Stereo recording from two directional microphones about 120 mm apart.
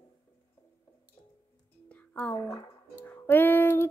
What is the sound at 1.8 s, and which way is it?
Music, 10° left (ahead or behind).